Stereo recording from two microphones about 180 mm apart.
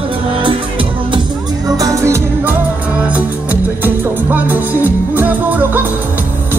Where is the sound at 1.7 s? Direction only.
15° right (ahead or behind).